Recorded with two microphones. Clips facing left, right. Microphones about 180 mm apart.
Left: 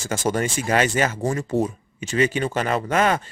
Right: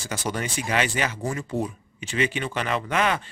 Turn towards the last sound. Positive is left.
turn(degrees=45)  # may be behind; listen again after turning